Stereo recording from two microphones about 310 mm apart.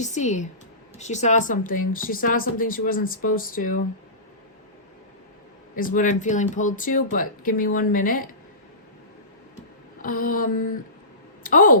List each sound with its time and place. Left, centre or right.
0.0 s speech: left
5.7 s speech: left
10.0 s speech: left